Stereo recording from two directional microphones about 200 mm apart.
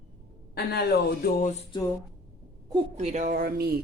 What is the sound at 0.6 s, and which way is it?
Speech, 55° left (ahead or behind).